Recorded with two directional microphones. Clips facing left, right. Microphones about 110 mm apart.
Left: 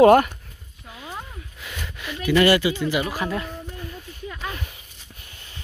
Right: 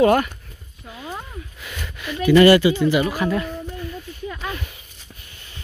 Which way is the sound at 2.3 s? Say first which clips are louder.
Right 6 dB; 5° left (ahead or behind).